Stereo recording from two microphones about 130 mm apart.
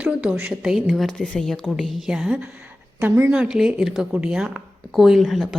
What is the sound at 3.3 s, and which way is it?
A woman's voice, 5° right (ahead or behind).